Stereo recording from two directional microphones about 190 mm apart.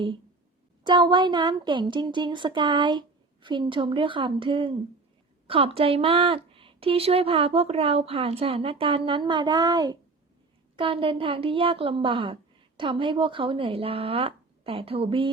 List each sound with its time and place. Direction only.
0.9 s a woman's voice: 25° right (ahead or behind)